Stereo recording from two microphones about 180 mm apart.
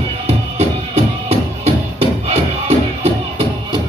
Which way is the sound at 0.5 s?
35° right (ahead or behind).